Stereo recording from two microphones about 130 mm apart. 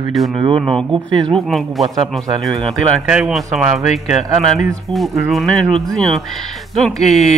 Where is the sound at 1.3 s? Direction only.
Centre (ahead or behind).